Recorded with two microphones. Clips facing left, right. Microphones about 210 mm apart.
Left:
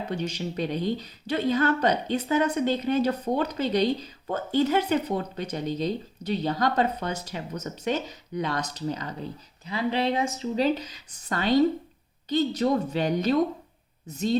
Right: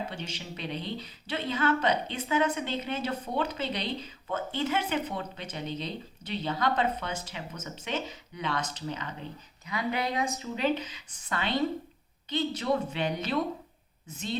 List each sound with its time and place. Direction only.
0.1 s speech: 45° left (ahead or behind)